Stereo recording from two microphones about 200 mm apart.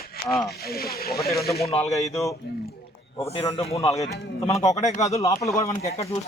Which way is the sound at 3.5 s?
30° left (ahead or behind).